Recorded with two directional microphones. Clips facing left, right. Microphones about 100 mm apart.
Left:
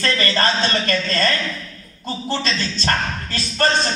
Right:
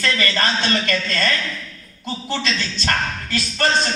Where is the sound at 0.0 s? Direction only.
35° left (ahead or behind).